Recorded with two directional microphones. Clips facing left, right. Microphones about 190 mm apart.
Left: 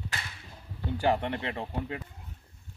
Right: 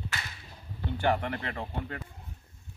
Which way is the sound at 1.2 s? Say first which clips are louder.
Left 2 dB; 25° left (ahead or behind).